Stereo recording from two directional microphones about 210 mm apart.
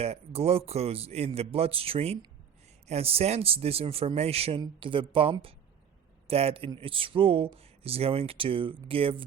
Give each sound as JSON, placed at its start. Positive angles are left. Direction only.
{"t": 0.0, "sound": "speech", "side_deg": -30}